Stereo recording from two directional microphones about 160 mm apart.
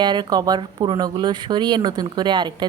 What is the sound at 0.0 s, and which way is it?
A woman's voice, 30° right (ahead or behind).